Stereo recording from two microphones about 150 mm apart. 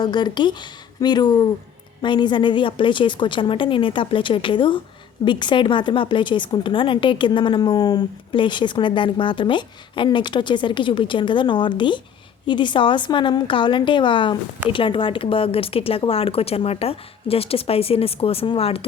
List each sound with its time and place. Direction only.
0.0 s a woman's voice: 30° left (ahead or behind)